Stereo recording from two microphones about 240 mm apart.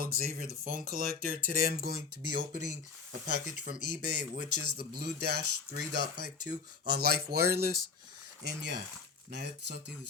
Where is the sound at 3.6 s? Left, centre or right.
Right.